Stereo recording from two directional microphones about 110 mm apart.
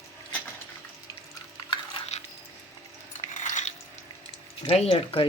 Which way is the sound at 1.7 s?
50° left (ahead or behind).